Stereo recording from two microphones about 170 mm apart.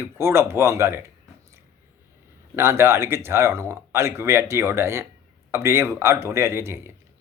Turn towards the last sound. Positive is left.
turn(degrees=-15)  # may be behind; listen again after turning